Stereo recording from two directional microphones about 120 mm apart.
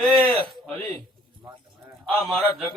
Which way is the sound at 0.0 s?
Centre (ahead or behind).